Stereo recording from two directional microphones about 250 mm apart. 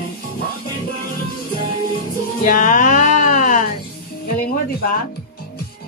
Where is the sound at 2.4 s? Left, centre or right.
Left.